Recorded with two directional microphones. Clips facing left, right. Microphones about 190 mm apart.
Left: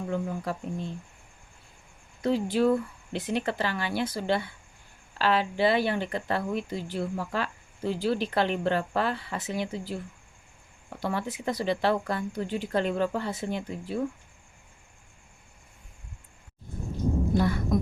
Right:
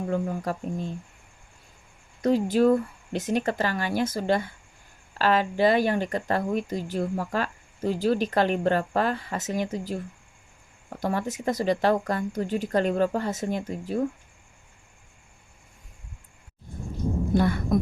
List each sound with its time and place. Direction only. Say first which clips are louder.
0.1 s speech: right 2 dB; 45° right (ahead or behind)
2.2 s speech: right 4 dB; 45° right (ahead or behind)
17.3 s a sound: right 4 dB; 55° right (ahead or behind)